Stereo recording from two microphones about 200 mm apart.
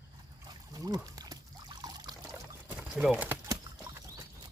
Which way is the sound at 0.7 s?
20° right (ahead or behind).